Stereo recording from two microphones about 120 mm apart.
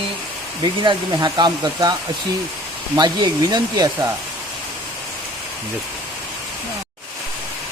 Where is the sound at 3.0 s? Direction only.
35° right (ahead or behind).